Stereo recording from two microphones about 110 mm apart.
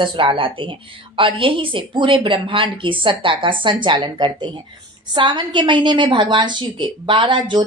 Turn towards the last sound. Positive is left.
turn(degrees=-50)  # may be behind; listen again after turning